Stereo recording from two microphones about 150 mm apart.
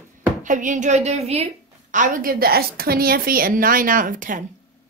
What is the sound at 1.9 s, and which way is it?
A woman's voice, 65° right (ahead or behind).